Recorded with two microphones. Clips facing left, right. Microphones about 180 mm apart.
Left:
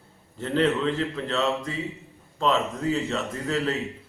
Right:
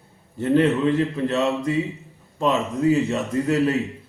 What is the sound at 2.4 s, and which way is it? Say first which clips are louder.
A man's voice: right 3 dB; 15° right (ahead or behind).